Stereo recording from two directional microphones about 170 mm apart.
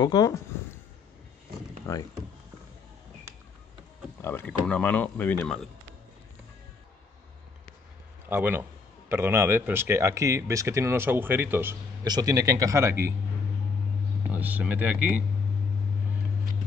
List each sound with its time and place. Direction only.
0.0 s speech: 20° left (ahead or behind)
4.2 s speech: 10° left (ahead or behind)
8.3 s speech: 10° right (ahead or behind)
14.3 s speech: 10° right (ahead or behind)